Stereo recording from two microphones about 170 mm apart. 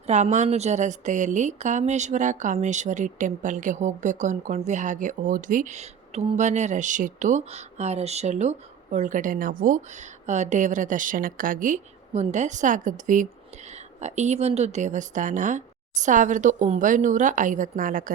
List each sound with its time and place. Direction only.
0.1 s a woman's voice: 45° right (ahead or behind)